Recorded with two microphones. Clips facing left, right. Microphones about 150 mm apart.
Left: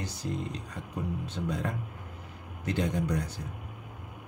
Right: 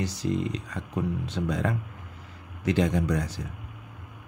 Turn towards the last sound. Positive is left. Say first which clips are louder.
# right 4 dB
turn(degrees=-90)